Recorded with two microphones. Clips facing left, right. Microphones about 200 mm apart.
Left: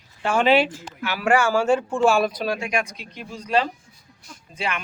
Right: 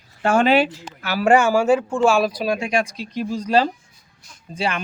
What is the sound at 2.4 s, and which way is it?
Speech, 20° right (ahead or behind).